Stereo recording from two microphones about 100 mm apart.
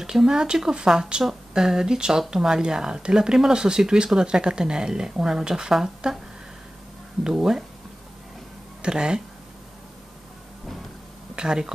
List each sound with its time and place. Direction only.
0.0 s speech: 5° right (ahead or behind)
7.2 s speech: 5° right (ahead or behind)
8.8 s speech: 10° right (ahead or behind)
11.3 s speech: 10° right (ahead or behind)